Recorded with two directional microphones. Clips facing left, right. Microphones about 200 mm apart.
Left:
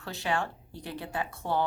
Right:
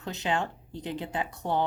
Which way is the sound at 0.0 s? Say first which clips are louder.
Right 1 dB; 20° right (ahead or behind).